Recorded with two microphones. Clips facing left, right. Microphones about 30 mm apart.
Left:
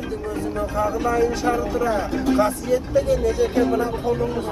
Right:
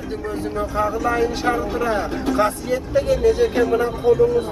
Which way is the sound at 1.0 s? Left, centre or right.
Right.